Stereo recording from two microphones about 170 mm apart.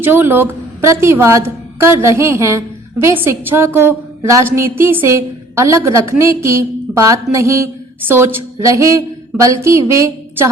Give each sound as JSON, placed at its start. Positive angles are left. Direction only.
{"t": 0.0, "sound": "a woman's voice", "side_deg": -10}